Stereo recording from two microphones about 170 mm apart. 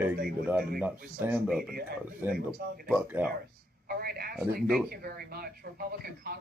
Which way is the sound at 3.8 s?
65° right (ahead or behind).